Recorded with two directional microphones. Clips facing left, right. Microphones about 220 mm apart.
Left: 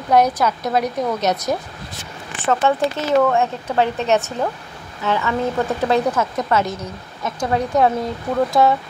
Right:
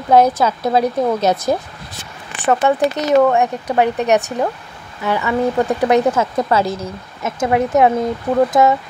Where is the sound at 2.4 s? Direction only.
15° right (ahead or behind).